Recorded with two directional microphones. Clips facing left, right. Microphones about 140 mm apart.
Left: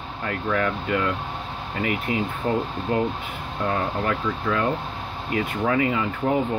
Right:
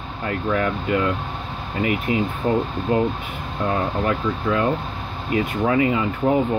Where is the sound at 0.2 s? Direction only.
20° right (ahead or behind).